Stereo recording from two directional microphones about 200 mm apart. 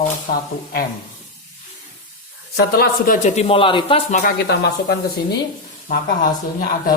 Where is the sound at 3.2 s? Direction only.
30° left (ahead or behind).